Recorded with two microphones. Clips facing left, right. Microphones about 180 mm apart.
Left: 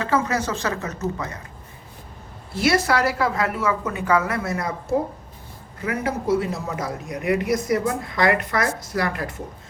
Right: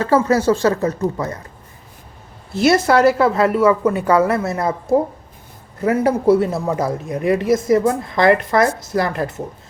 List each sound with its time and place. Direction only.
0.0 s speech: 35° right (ahead or behind)
2.5 s a woman's voice: 25° right (ahead or behind)
5.8 s a woman's voice: 40° right (ahead or behind)